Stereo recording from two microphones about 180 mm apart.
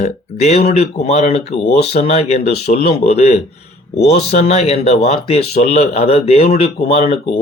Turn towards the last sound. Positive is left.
turn(degrees=35)  # may be behind; listen again after turning